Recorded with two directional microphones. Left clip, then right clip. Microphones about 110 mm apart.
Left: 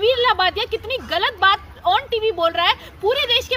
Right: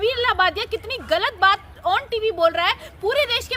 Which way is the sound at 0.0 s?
35° right (ahead or behind).